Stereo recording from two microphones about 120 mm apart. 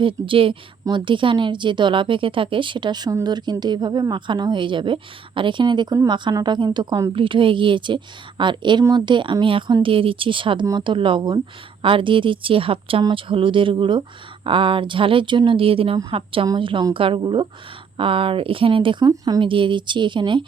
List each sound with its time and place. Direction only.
0.0 s a woman's voice: 45° right (ahead or behind)
19.0 s speech: 35° right (ahead or behind)